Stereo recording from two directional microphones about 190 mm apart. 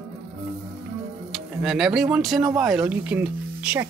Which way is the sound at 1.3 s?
Centre (ahead or behind).